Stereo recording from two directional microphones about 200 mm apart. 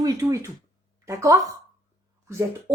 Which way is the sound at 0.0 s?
15° right (ahead or behind).